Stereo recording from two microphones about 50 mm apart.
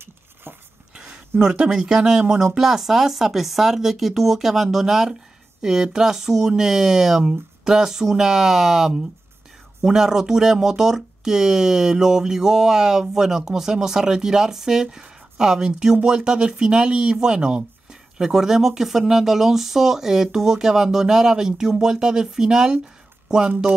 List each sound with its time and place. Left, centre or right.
0.0 s dog: right
0.9 s a sound: right
1.4 s speech: centre